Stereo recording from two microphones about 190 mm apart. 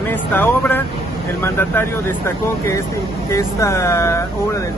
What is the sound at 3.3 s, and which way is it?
Speech, 15° left (ahead or behind).